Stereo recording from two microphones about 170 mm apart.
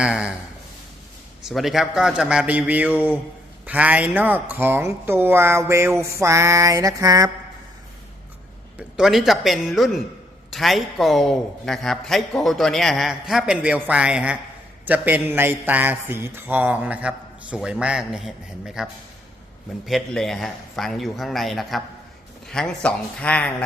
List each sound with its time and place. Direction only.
0.0 s speech: 5° right (ahead or behind)
1.5 s a man's voice: centre (ahead or behind); by 7.3 s 20° right (ahead or behind)
9.0 s a man's voice: centre (ahead or behind)